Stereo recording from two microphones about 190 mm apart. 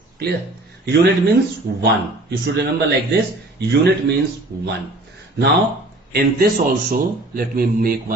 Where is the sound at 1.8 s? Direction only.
60° right (ahead or behind).